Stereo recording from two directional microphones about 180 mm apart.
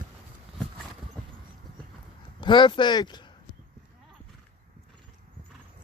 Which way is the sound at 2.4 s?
25° left (ahead or behind).